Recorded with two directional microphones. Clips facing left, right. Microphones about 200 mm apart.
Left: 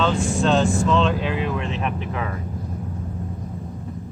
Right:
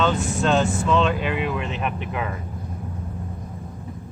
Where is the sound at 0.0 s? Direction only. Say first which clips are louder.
Left 1 dB; 5° right (ahead or behind).